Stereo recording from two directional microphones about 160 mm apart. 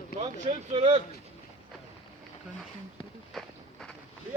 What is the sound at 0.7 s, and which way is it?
Speech, 30° right (ahead or behind).